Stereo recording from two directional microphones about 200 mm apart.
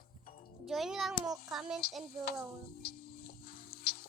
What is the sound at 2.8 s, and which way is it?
Music, 50° left (ahead or behind).